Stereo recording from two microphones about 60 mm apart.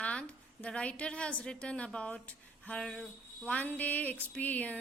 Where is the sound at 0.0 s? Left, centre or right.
Left.